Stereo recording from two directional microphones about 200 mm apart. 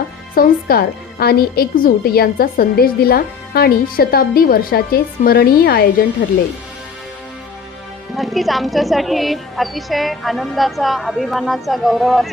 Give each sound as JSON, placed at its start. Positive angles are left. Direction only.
{"t": 0.3, "sound": "a woman's voice", "side_deg": 50}
{"t": 8.1, "sound": "speech", "side_deg": 0}